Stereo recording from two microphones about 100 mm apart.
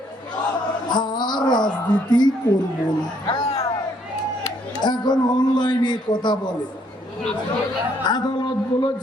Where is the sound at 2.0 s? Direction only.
45° left (ahead or behind).